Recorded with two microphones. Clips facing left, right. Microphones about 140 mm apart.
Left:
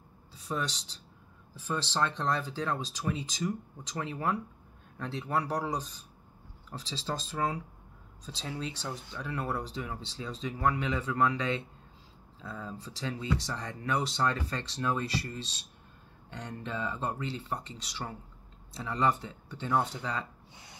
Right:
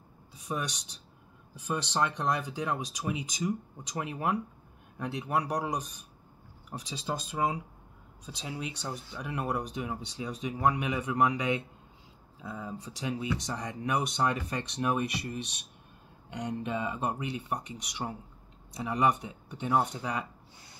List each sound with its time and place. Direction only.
0.3 s speech: 15° right (ahead or behind)